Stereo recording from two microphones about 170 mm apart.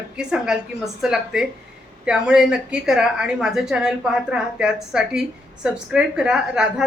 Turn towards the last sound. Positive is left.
turn(degrees=-5)  # may be behind; listen again after turning